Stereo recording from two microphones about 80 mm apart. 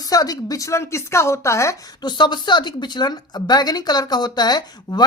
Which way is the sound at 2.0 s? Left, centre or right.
Left.